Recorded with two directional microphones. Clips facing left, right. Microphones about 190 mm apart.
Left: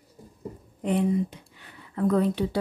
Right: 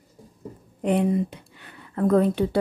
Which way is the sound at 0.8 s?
60° right (ahead or behind).